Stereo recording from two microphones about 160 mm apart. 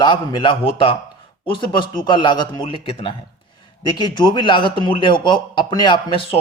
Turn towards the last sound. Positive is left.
turn(degrees=30)  # may be behind; listen again after turning